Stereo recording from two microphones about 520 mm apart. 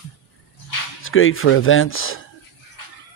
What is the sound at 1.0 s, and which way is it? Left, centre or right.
Speech, left.